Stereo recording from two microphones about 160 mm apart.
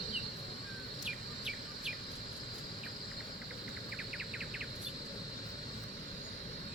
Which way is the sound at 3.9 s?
5° right (ahead or behind).